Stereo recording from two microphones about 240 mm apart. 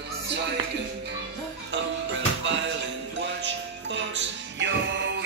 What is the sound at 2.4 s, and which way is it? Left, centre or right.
Music, right.